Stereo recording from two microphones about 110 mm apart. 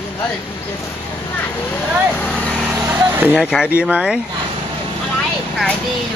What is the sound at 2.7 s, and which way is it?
Vehicle, 20° right (ahead or behind).